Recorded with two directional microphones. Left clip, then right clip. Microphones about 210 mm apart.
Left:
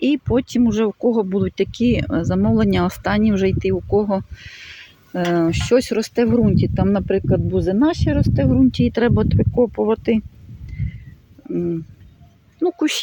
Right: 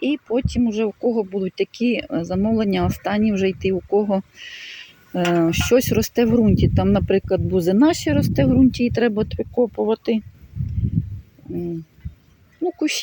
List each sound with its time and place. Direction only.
0.0 s speech: 20° left (ahead or behind); by 8.7 s 5° right (ahead or behind)
8.7 s speech: 5° left (ahead or behind)
12.6 s speech: 20° left (ahead or behind)